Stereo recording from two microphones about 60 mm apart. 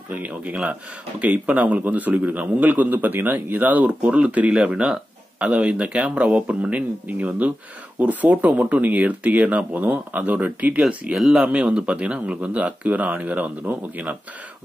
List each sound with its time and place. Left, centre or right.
0.1 s speech: right